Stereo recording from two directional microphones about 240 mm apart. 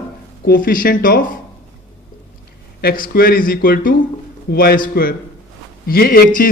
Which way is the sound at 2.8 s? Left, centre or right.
Left.